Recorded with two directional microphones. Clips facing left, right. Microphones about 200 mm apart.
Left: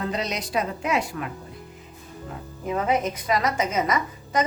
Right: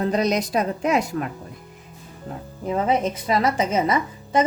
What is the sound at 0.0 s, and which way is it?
A woman's voice, 40° right (ahead or behind).